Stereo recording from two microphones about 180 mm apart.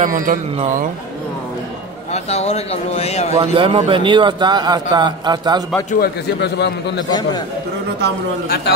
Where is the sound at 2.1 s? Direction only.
35° left (ahead or behind).